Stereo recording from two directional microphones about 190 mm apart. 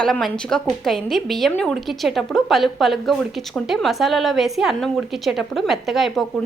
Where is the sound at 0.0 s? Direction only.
Centre (ahead or behind).